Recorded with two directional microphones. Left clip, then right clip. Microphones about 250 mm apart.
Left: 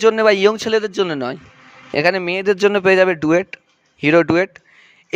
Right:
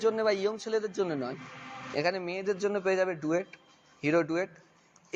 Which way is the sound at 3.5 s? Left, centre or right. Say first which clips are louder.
Left 16 dB; left.